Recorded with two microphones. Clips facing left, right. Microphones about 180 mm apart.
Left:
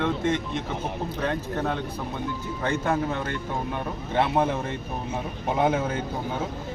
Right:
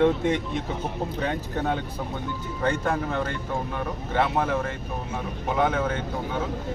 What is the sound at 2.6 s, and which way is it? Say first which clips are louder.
Speech: right 1 dB; 5° left (ahead or behind).